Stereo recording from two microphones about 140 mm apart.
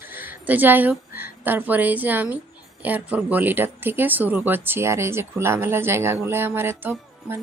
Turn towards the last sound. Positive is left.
turn(degrees=-15)  # may be behind; listen again after turning